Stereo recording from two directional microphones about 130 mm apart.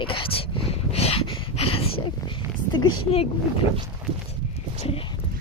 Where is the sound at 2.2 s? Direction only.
35° left (ahead or behind).